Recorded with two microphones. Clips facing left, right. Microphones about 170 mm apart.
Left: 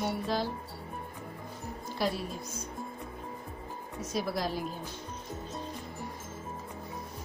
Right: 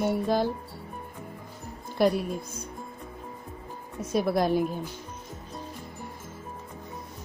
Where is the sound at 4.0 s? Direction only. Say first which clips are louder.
Right 8 dB; 55° right (ahead or behind).